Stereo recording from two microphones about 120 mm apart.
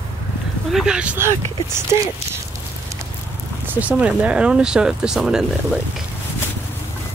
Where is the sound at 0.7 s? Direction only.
5° right (ahead or behind).